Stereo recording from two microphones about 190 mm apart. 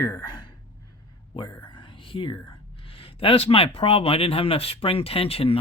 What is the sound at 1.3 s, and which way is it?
Whispering, 25° left (ahead or behind).